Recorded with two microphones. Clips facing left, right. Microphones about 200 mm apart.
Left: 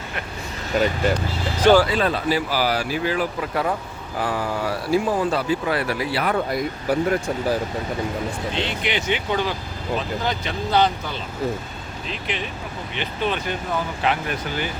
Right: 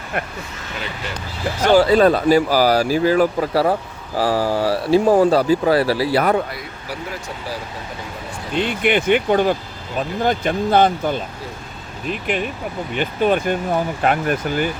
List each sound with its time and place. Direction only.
0.7 s speech: 45° left (ahead or behind)
1.9 s speech: 40° right (ahead or behind)
5.0 s speech: 40° right (ahead or behind)
6.5 s speech: 50° left (ahead or behind)
8.5 s speech: 50° right (ahead or behind)